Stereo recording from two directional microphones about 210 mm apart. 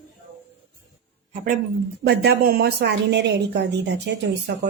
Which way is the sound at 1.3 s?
40° right (ahead or behind).